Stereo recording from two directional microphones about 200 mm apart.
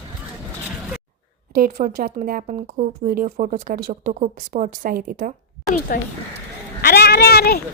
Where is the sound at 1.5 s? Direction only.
45° right (ahead or behind).